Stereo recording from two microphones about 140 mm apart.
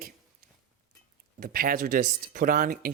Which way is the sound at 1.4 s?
90° right.